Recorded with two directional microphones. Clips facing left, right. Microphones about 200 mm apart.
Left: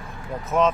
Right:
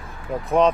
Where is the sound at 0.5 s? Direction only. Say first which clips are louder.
Right 3 dB; 35° right (ahead or behind).